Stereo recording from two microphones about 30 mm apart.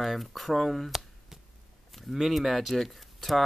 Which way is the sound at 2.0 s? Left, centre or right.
Centre.